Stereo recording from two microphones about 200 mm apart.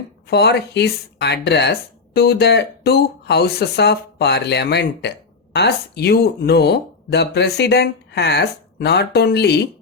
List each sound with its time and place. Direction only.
0.3 s speech: 55° left (ahead or behind)